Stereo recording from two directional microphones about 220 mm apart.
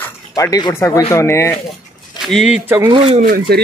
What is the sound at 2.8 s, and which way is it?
Speech, 25° right (ahead or behind).